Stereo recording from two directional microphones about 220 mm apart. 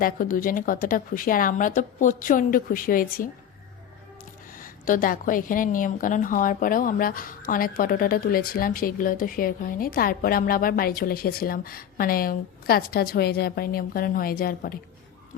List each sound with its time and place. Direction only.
0.0 s a woman's voice: 40° left (ahead or behind)
4.5 s a woman's voice: 40° left (ahead or behind)